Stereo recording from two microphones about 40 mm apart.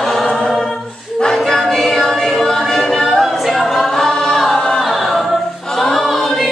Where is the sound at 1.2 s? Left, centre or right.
Centre.